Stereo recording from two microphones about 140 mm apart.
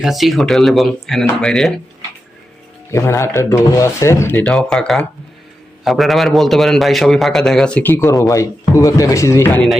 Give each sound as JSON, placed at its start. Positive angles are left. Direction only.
{"t": 0.0, "sound": "a man's voice", "side_deg": 0}
{"t": 2.9, "sound": "speech", "side_deg": 20}
{"t": 4.5, "sound": "a man's voice", "side_deg": 5}